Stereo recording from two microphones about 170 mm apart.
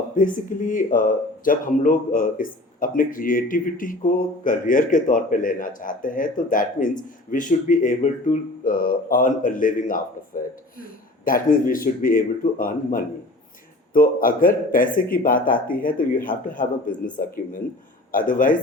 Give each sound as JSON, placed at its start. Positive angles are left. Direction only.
{"t": 0.2, "sound": "speech", "side_deg": 50}